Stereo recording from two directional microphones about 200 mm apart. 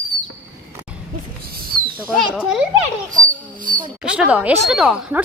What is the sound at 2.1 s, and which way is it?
Speech, 5° right (ahead or behind).